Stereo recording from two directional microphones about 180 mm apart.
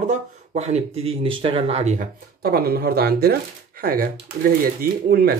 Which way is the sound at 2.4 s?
60° right (ahead or behind).